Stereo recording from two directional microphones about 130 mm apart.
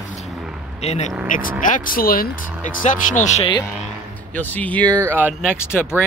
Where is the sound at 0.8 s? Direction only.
55° left (ahead or behind).